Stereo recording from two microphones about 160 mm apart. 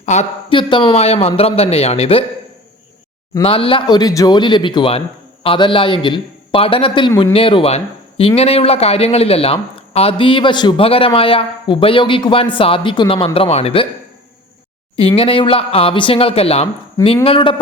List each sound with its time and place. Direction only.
0.0 s speech: 50° left (ahead or behind)
0.5 s speech: 30° left (ahead or behind)
3.4 s speech: 35° left (ahead or behind)
14.9 s speech: 35° left (ahead or behind)